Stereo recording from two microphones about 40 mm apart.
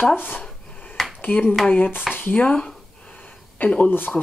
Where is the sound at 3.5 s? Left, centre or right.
Left.